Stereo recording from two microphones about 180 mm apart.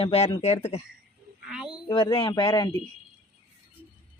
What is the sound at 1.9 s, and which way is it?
Speech, 25° left (ahead or behind).